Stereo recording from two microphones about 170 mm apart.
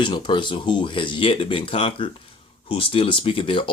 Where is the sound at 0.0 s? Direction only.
30° left (ahead or behind).